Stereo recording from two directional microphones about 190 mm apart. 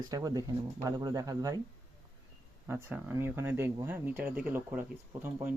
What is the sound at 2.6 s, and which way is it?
Speech, 15° right (ahead or behind).